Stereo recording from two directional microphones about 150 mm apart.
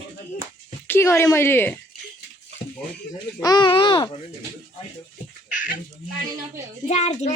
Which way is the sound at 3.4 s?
25° left (ahead or behind).